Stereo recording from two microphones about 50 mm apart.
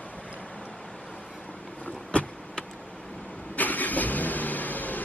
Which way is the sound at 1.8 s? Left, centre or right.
Left.